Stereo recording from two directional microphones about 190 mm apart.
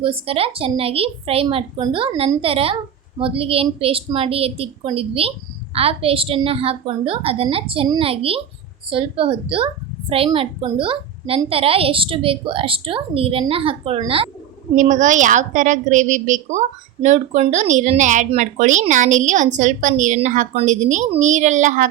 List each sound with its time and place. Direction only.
0.0 s a woman's voice: 30° right (ahead or behind)
14.8 s a woman's voice: 40° right (ahead or behind)